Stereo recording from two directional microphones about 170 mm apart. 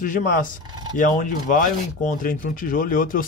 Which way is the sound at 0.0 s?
50° left (ahead or behind).